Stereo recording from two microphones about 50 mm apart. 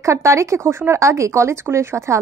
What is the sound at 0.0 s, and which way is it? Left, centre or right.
A woman's voice, right.